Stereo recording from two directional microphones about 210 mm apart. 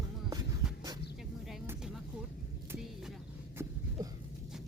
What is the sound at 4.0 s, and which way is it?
Dog, 15° right (ahead or behind).